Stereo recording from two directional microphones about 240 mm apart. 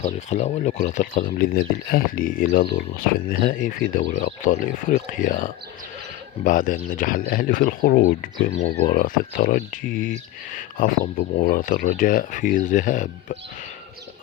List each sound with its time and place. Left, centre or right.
0.0 s speech: left